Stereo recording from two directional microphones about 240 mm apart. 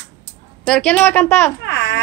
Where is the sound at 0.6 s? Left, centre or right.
Centre.